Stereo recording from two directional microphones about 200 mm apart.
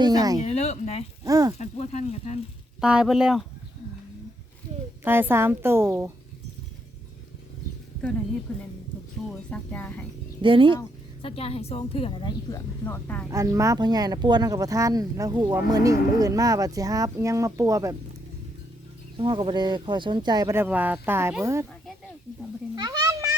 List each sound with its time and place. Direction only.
0.0 s speech: 20° right (ahead or behind)
0.4 s speech: 35° left (ahead or behind)
1.2 s speech: 15° right (ahead or behind)
1.5 s speech: 35° left (ahead or behind)
2.8 s speech: 5° right (ahead or behind)
5.0 s speech: 10° right (ahead or behind)
8.5 s speech: 10° left (ahead or behind)
10.4 s speech: 25° right (ahead or behind)
10.8 s speech: 25° left (ahead or behind); by 13.2 s 10° left (ahead or behind)
13.3 s speech: 15° right (ahead or behind)
19.1 s speech: 25° right (ahead or behind)
22.7 s children playing: 20° right (ahead or behind)